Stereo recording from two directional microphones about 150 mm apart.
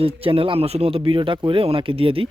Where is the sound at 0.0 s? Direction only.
35° right (ahead or behind).